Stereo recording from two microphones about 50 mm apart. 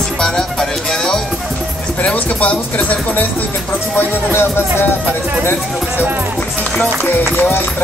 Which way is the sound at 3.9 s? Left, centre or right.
Left.